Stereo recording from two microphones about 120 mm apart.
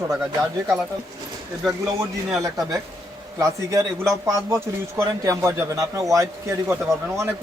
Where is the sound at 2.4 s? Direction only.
30° right (ahead or behind).